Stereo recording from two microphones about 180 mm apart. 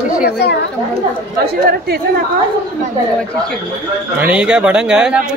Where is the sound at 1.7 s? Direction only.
60° right (ahead or behind).